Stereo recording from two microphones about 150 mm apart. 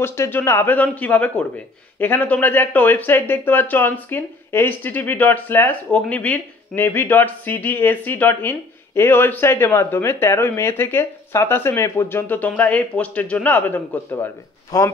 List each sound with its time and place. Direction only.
0.0 s speech: 15° left (ahead or behind)
14.7 s speech: 25° left (ahead or behind)